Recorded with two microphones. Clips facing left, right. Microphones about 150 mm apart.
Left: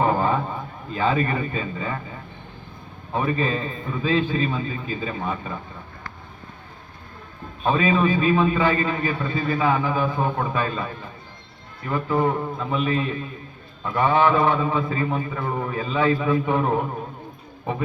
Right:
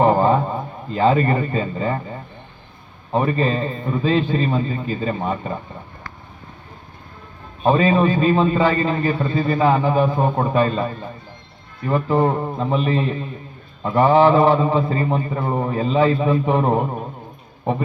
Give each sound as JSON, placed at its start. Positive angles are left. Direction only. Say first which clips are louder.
{"t": 0.0, "sound": "a sound", "louder": "right 6 dB", "side_deg": -30}
{"t": 3.1, "sound": "a man's voice", "louder": "right 4 dB", "side_deg": -35}
{"t": 4.4, "sound": "a man's voice", "louder": "right 5 dB", "side_deg": -40}
{"t": 7.6, "sound": "a man's voice", "louder": "right 4 dB", "side_deg": -35}